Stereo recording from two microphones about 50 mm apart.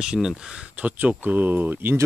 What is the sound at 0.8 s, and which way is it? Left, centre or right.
Speech, right.